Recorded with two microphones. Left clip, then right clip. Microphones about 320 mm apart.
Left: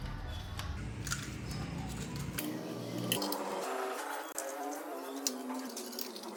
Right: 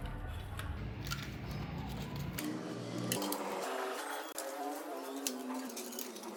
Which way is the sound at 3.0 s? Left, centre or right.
Centre.